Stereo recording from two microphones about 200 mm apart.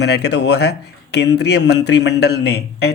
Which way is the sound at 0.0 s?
55° left (ahead or behind).